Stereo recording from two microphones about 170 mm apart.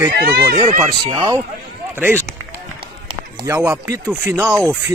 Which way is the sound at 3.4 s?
10° right (ahead or behind).